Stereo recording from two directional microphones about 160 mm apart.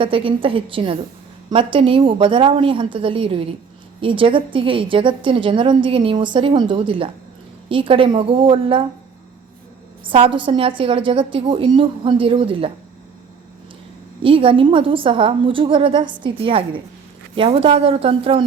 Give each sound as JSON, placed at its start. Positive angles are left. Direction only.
{"t": 0.0, "sound": "a woman's voice", "side_deg": -35}
{"t": 10.1, "sound": "a woman's voice", "side_deg": -35}
{"t": 14.2, "sound": "a woman's voice", "side_deg": -35}